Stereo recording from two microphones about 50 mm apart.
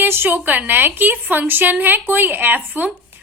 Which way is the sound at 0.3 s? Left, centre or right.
Right.